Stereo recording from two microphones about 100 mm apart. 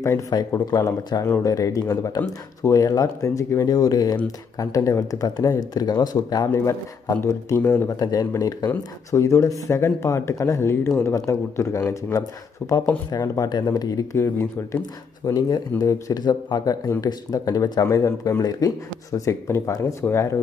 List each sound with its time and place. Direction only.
0.3 s speech: 40° left (ahead or behind)
0.8 s speech: 30° left (ahead or behind)
6.5 s speech: 30° left (ahead or behind)
7.6 s speech: 15° left (ahead or behind)
8.0 s speech: 40° left (ahead or behind)
13.5 s speech: 40° left (ahead or behind)
14.1 s speech: 25° left (ahead or behind)
15.2 s speech: 40° left (ahead or behind)